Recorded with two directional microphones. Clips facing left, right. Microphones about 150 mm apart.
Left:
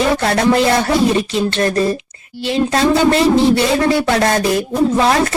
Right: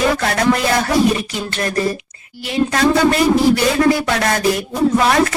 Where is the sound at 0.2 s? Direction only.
25° left (ahead or behind).